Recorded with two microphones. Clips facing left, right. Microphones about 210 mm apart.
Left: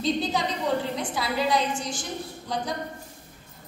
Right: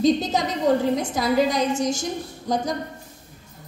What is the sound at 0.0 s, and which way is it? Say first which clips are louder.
A woman's voice: right 6 dB; 45° right (ahead or behind).